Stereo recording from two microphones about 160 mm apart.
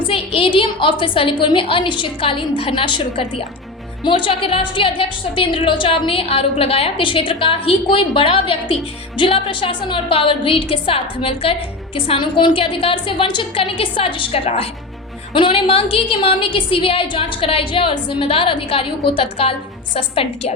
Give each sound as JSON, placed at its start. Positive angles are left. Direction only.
{"t": 0.1, "sound": "a woman's voice", "side_deg": 35}